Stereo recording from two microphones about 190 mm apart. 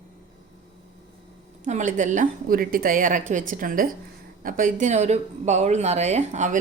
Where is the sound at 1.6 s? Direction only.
40° right (ahead or behind).